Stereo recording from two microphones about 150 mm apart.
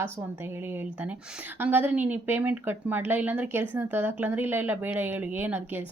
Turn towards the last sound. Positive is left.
turn(degrees=-10)  # may be behind; listen again after turning